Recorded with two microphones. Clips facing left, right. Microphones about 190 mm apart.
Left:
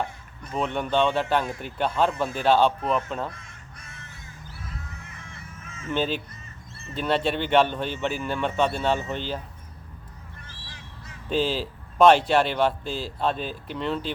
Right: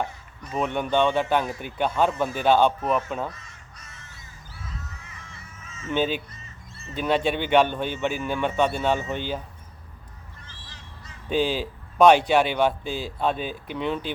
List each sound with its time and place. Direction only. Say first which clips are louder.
0.5 s a man's voice: right 1 dB; 5° right (ahead or behind)
3.3 s crow: left 1 dB; 55° left (ahead or behind)
5.0 s crow: left 2 dB; 55° left (ahead or behind)
5.9 s a man's voice: right 2 dB; 5° right (ahead or behind)
11.3 s a man's voice: right 1 dB; centre (ahead or behind)